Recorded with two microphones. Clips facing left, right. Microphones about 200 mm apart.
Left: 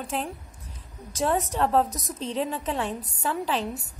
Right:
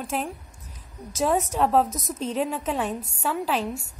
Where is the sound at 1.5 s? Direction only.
10° right (ahead or behind).